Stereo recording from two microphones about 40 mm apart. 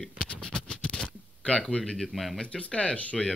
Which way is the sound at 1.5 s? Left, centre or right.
Centre.